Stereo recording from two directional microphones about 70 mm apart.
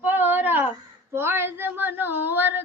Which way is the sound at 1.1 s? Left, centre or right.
Right.